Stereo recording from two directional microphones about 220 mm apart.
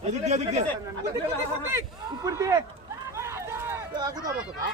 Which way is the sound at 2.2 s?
15° right (ahead or behind).